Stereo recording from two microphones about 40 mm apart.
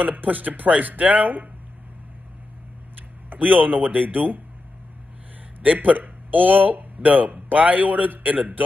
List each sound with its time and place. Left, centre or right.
0.0 s speech: right
3.0 s speech: right
5.6 s speech: right